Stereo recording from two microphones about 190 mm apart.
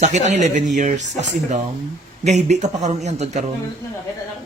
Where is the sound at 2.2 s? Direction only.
35° right (ahead or behind).